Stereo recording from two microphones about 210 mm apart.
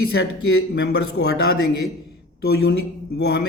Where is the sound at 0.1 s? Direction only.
55° left (ahead or behind).